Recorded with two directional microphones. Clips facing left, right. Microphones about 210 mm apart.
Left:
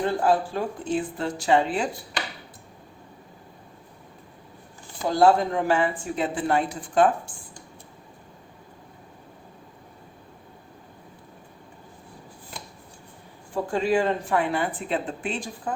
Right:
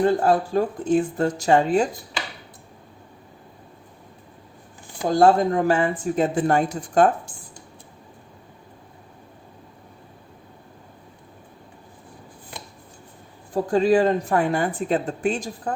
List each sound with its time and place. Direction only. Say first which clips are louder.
0.3 s speech: right 3 dB; 45° right (ahead or behind)
5.0 s speech: right 3 dB; 45° right (ahead or behind)
13.5 s speech: right 5 dB; 40° right (ahead or behind)